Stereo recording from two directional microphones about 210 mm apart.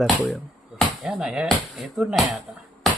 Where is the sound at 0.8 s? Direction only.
5° right (ahead or behind).